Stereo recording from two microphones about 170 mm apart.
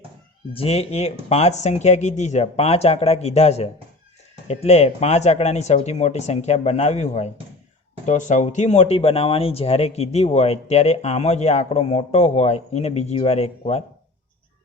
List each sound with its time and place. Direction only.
0.5 s speech: 35° left (ahead or behind)